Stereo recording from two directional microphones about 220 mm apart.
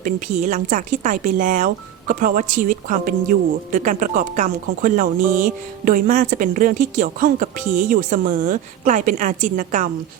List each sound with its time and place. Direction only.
0.0 s speech: 35° right (ahead or behind)